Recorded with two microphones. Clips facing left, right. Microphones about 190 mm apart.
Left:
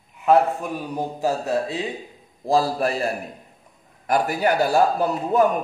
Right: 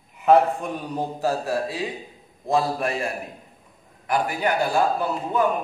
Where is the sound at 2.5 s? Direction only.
35° left (ahead or behind).